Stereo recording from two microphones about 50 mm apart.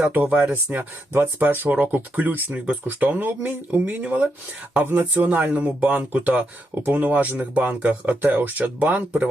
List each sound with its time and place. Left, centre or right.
0.1 s speech: right
6.8 s speech: right